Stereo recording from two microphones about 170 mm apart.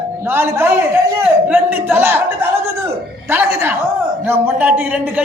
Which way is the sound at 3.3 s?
15° right (ahead or behind).